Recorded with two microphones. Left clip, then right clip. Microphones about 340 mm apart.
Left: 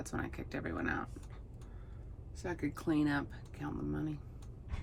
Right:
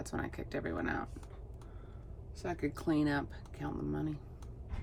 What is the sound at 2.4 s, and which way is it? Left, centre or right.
Speech, centre.